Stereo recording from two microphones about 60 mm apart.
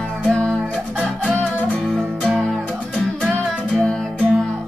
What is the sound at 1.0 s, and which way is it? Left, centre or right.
Music, centre.